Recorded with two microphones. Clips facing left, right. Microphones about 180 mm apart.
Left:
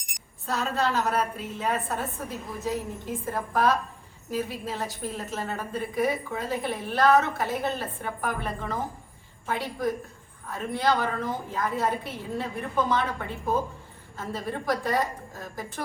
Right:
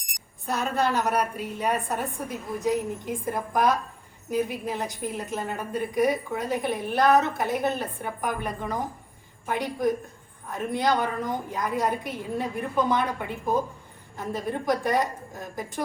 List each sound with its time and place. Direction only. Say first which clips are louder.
0.4 s a woman's voice: right 1 dB; 15° right (ahead or behind)